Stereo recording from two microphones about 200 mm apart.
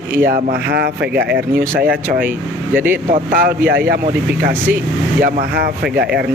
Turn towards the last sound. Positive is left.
turn(degrees=-55)  # may be behind; listen again after turning